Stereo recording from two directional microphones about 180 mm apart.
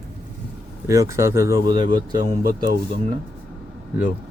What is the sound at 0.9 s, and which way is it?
Speech, 15° right (ahead or behind).